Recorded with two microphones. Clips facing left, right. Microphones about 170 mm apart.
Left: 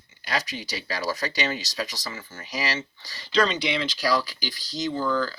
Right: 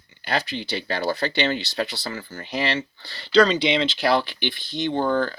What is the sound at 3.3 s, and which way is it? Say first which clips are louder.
Speech: right 6 dB; 35° right (ahead or behind).